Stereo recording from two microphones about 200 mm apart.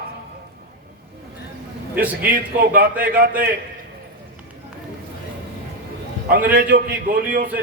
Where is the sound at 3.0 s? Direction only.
45° right (ahead or behind).